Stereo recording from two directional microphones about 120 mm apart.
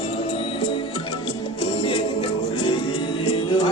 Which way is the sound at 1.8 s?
50° left (ahead or behind).